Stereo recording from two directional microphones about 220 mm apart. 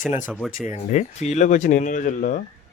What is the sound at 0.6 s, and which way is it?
Speech, 30° left (ahead or behind).